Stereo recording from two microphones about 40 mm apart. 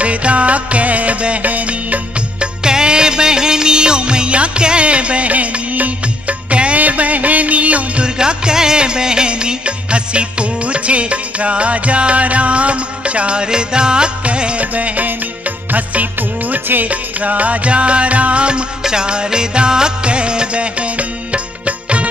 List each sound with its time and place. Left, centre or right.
0.0 s music: right
2.4 s music: centre
8.2 s music: centre; by 16.8 s right
16.8 s music: right